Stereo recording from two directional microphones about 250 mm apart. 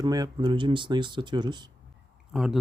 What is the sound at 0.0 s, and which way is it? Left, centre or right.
Speech, centre.